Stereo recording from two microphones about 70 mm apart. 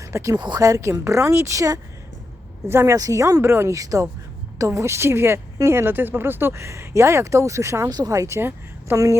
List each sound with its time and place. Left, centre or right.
0.0 s speech: right
0.3 s speech: right
0.6 s speech: right
2.6 s speech: right
2.9 s speech: right
3.4 s speech: right
3.7 s speech: right
7.9 s speech: right
8.1 s speech: right
8.4 s speech: right